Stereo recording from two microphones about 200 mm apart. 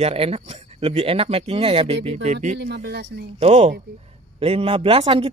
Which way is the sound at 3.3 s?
30° right (ahead or behind).